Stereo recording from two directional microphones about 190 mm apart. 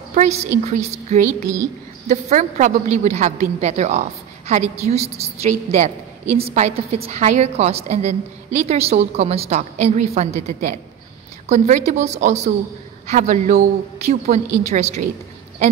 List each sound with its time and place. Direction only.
0.1 s a woman's voice: 35° right (ahead or behind)